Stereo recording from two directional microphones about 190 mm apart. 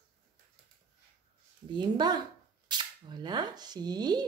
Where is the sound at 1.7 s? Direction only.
25° right (ahead or behind).